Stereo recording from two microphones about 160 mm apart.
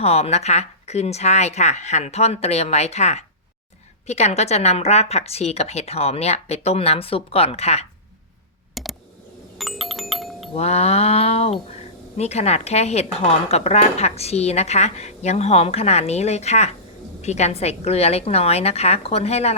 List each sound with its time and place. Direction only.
0.0 s a woman's voice: 40° left (ahead or behind)
8.7 s a sound: centre (ahead or behind)
9.6 s music: centre (ahead or behind)
10.5 s a woman's voice: 40° left (ahead or behind)